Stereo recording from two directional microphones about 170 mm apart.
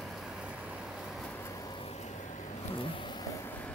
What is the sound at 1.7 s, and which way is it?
Vehicle, 40° left (ahead or behind).